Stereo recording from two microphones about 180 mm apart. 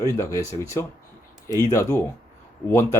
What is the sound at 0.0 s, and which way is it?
Speech, 15° left (ahead or behind).